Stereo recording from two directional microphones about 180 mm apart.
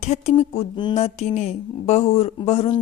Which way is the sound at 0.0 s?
40° left (ahead or behind).